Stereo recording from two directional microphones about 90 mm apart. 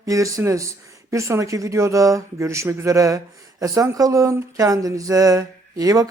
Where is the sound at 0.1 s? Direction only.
40° right (ahead or behind).